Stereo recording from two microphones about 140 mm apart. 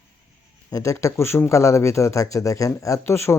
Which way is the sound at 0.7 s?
20° left (ahead or behind).